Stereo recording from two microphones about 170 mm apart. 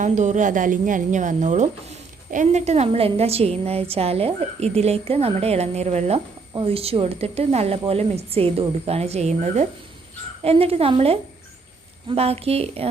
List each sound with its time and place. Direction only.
0.0 s speech: 45° right (ahead or behind)